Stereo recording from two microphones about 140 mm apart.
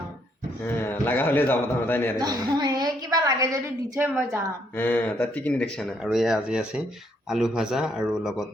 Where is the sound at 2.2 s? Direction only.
30° right (ahead or behind).